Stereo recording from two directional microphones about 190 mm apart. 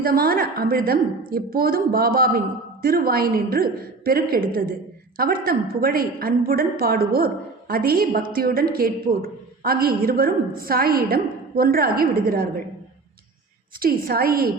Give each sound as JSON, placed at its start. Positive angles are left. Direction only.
{"t": 0.0, "sound": "a man's voice", "side_deg": -50}
{"t": 13.7, "sound": "a man's voice", "side_deg": -50}